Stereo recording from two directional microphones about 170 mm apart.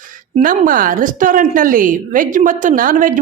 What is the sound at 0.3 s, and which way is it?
A woman's voice, 55° right (ahead or behind).